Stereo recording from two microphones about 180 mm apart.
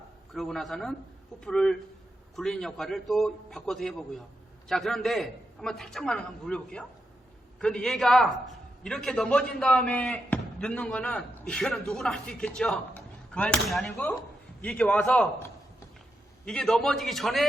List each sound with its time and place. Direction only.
0.3 s a man's voice: centre (ahead or behind)
16.5 s a man's voice: 5° left (ahead or behind)